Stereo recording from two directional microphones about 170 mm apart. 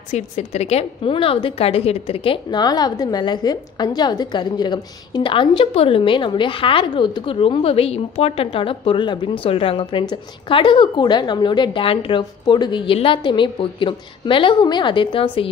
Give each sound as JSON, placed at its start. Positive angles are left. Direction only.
{"t": 0.1, "sound": "a woman's voice", "side_deg": 40}